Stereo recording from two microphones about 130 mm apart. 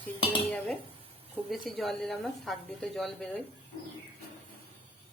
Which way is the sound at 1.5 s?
Centre (ahead or behind).